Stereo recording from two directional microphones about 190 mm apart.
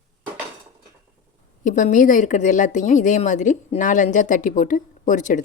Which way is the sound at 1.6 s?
40° left (ahead or behind).